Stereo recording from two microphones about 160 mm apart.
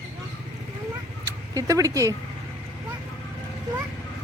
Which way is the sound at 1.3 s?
20° right (ahead or behind).